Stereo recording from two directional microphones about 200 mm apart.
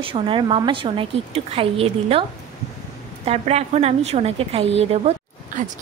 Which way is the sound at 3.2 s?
30° right (ahead or behind).